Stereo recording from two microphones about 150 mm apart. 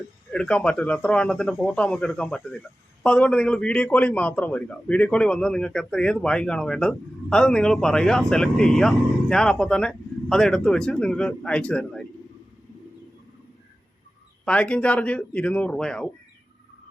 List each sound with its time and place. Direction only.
0.3 s a man's voice: 5° left (ahead or behind)
14.4 s speech: 5° left (ahead or behind)